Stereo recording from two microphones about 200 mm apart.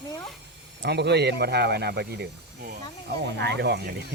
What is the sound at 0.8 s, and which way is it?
Speech, 55° right (ahead or behind).